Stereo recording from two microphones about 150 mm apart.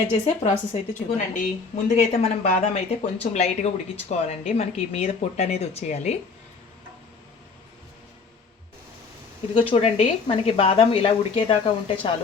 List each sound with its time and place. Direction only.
0.1 s a woman's voice: 50° left (ahead or behind)
9.6 s speech: 35° left (ahead or behind)